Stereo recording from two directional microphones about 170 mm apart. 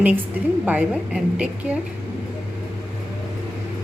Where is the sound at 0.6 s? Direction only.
10° right (ahead or behind).